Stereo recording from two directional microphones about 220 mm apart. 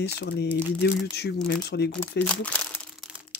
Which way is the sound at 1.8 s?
5° left (ahead or behind).